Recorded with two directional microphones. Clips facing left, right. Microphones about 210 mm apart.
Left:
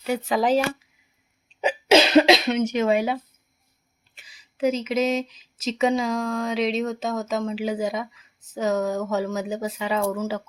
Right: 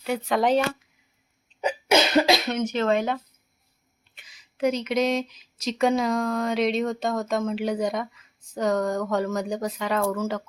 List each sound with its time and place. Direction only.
0.0 s speech: centre (ahead or behind)
1.6 s cough: 25° left (ahead or behind)
2.7 s speech: 10° left (ahead or behind)
4.2 s speech: 5° left (ahead or behind)